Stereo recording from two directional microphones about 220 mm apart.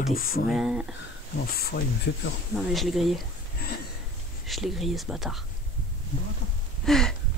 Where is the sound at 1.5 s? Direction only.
45° left (ahead or behind).